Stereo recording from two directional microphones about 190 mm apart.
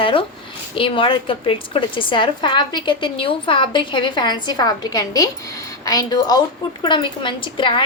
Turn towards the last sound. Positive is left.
turn(degrees=25)  # may be behind; listen again after turning